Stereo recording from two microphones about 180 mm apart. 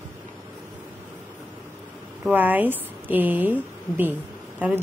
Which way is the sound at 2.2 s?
10° right (ahead or behind).